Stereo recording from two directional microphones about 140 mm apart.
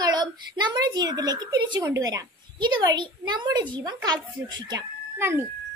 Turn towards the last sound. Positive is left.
turn(degrees=-20)  # may be behind; listen again after turning